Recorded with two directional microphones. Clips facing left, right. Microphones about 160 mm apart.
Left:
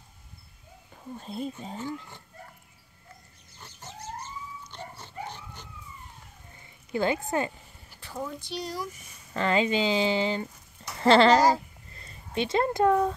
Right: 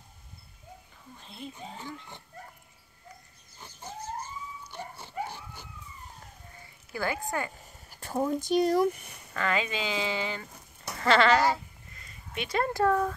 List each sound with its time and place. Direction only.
1.1 s speech: 40° left (ahead or behind)
4.6 s dog: 10° right (ahead or behind)
6.9 s speech: 25° left (ahead or behind)
7.9 s speech: 45° right (ahead or behind)
9.3 s speech: 30° left (ahead or behind)